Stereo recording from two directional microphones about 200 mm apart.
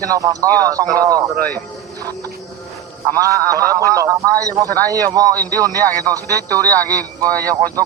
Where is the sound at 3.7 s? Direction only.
15° right (ahead or behind).